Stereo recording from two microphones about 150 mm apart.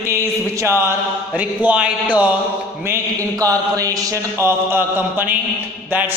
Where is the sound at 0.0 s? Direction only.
20° right (ahead or behind).